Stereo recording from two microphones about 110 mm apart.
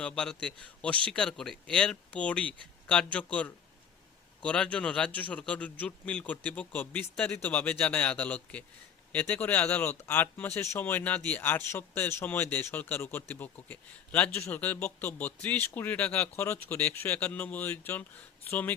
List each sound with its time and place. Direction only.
0.0 s speech: 10° left (ahead or behind)